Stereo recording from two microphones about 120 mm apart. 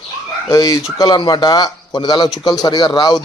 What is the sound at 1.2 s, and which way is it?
A man's voice, 40° left (ahead or behind).